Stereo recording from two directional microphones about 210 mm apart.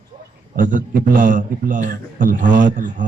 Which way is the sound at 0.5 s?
40° right (ahead or behind).